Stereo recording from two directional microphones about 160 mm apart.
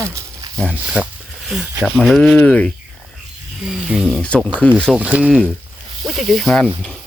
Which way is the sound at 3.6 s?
5° right (ahead or behind).